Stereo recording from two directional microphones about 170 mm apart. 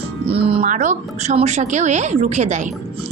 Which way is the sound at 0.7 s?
45° right (ahead or behind).